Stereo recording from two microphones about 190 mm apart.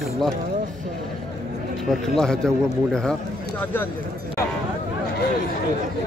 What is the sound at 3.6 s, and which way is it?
Speech, 10° left (ahead or behind).